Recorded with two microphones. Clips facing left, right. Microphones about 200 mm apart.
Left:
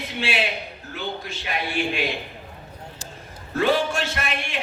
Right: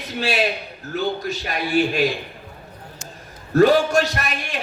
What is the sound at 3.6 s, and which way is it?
A man's voice, 40° right (ahead or behind).